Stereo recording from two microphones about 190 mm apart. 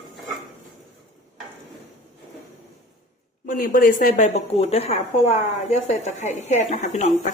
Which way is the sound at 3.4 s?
45° left (ahead or behind).